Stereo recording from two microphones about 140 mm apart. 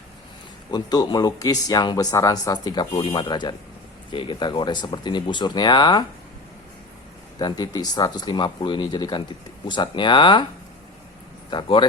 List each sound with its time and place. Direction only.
0.7 s speech: 30° left (ahead or behind)
7.3 s speech: 30° left (ahead or behind)
11.5 s speech: 35° left (ahead or behind)